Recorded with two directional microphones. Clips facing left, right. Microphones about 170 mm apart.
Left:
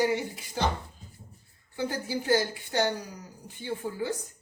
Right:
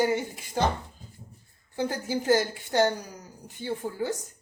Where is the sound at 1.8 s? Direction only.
40° right (ahead or behind).